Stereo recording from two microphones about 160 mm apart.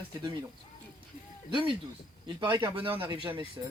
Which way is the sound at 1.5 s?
30° right (ahead or behind).